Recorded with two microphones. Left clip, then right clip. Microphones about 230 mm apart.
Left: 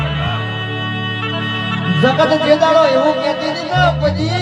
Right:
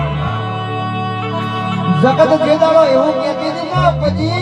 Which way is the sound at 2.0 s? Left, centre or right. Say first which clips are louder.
Right 2 dB; left.